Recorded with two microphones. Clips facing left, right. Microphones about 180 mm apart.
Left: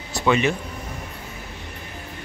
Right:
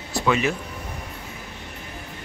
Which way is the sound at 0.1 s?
Centre (ahead or behind).